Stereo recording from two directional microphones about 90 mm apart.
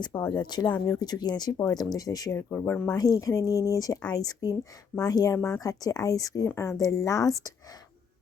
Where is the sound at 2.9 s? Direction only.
45° left (ahead or behind).